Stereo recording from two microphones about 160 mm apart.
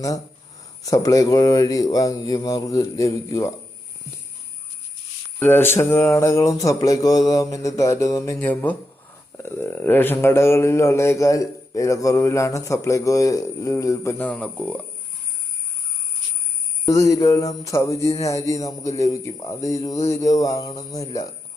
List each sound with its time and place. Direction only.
0.9 s mantra: 20° left (ahead or behind)
5.4 s mantra: 15° left (ahead or behind)
9.4 s a man's voice: 15° left (ahead or behind)
16.8 s mantra: 20° left (ahead or behind)